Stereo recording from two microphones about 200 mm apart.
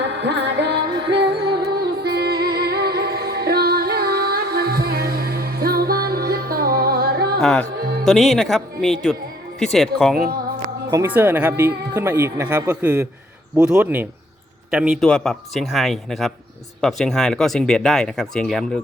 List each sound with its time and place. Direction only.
0.0 s music: 60° right (ahead or behind)
7.4 s speech: 5° left (ahead or behind)
10.9 s speech: 10° right (ahead or behind)